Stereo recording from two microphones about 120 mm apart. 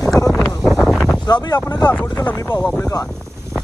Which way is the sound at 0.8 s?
5° left (ahead or behind).